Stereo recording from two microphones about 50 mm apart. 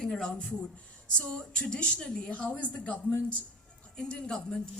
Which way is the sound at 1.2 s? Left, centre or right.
Centre.